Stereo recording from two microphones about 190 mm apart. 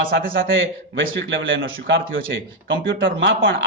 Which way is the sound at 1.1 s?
75° right (ahead or behind).